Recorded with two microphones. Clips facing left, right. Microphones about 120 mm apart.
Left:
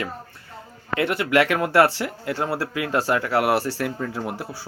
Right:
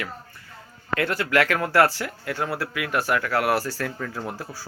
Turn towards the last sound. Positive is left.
turn(degrees=25)  # may be behind; listen again after turning